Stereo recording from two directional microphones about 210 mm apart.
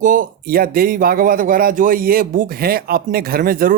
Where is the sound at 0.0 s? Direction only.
40° right (ahead or behind).